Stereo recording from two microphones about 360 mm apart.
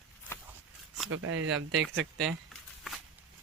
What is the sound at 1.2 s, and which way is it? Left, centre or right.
Speech, right.